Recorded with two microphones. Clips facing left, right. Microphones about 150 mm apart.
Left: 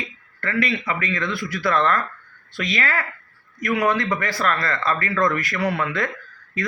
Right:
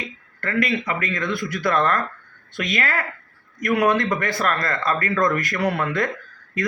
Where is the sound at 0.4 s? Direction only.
45° right (ahead or behind).